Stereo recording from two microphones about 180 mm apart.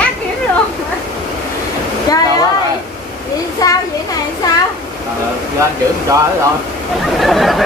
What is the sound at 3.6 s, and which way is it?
Speech, 20° left (ahead or behind).